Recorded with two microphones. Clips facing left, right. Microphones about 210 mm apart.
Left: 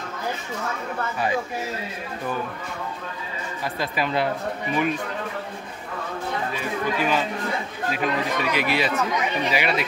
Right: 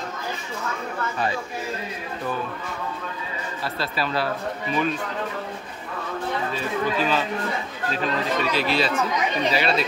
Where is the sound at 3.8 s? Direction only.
15° left (ahead or behind).